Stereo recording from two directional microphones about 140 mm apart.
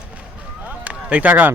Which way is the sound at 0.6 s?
10° right (ahead or behind).